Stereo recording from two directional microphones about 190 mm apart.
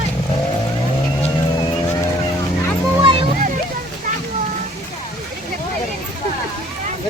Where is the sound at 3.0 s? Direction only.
25° right (ahead or behind).